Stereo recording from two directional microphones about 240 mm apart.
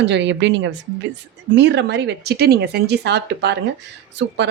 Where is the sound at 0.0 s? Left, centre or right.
Right.